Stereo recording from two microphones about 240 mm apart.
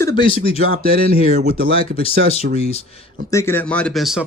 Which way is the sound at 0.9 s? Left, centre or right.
Right.